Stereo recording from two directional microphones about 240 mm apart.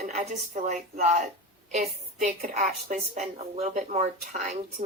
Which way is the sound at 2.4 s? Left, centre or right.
Right.